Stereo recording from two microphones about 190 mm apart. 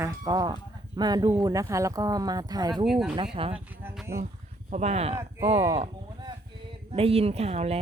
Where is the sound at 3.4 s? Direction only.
30° right (ahead or behind).